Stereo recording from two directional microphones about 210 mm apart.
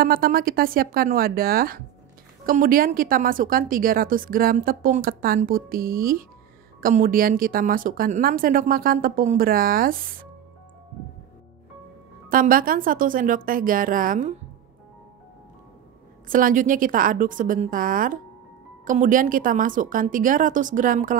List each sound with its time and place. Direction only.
0.0 s a woman's voice: 45° right (ahead or behind)
12.3 s a woman's voice: 40° right (ahead or behind)
16.3 s a woman's voice: 40° right (ahead or behind)